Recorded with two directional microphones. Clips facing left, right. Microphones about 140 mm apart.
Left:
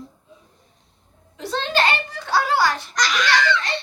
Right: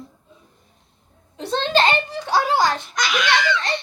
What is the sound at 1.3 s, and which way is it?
A child's voice, 30° right (ahead or behind).